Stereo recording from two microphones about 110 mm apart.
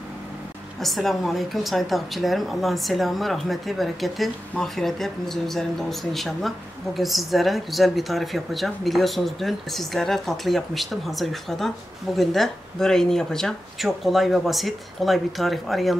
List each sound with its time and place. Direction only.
0.7 s a woman's voice: centre (ahead or behind)